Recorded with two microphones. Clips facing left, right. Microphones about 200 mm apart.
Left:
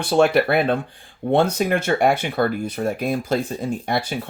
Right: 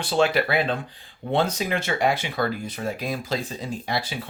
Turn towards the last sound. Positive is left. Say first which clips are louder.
# left 5 dB
turn(degrees=55)  # may be behind; listen again after turning